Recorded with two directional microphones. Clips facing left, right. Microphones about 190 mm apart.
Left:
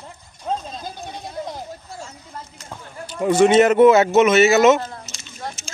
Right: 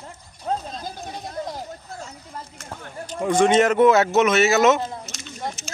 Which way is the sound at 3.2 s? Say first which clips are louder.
Left 4 dB; 5° left (ahead or behind).